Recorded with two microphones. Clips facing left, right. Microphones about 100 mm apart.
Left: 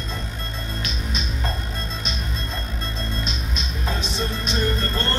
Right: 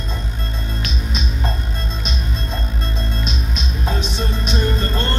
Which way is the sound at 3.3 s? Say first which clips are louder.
Right 4 dB; 15° right (ahead or behind).